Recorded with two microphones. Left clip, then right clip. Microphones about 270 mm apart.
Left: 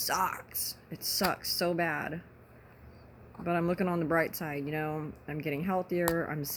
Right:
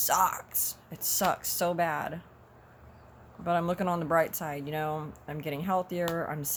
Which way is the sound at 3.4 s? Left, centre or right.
Centre.